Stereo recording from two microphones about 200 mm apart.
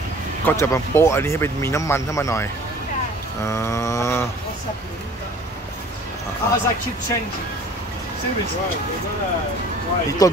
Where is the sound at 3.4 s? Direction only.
15° left (ahead or behind).